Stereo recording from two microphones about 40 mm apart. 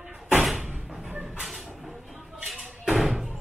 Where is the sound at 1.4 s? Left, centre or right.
Centre.